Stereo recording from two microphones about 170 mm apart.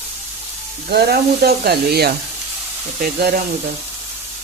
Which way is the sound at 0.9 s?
65° right (ahead or behind).